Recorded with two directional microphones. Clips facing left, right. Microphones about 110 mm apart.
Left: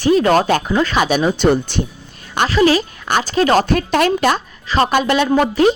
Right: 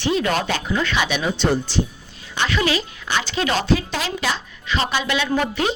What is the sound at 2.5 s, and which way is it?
Speech, 40° left (ahead or behind).